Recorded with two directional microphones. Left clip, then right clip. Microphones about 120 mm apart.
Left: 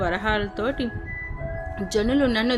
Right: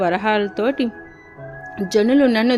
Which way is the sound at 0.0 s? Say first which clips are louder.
Right 6 dB; 35° right (ahead or behind).